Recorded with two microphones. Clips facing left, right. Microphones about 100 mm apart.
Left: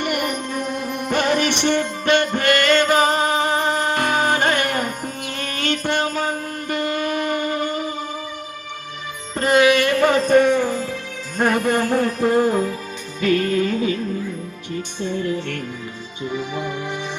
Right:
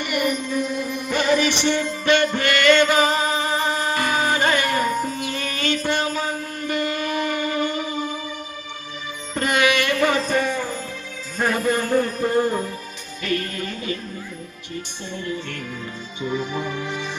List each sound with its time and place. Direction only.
0.0 s music: 50° left (ahead or behind)
9.3 s music: 35° left (ahead or behind); by 10.8 s 80° left
11.3 s music: 60° left (ahead or behind); by 12.7 s 90° left
16.3 s speech: 15° left (ahead or behind)